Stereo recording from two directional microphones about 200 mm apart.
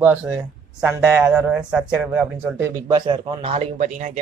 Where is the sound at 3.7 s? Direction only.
40° right (ahead or behind).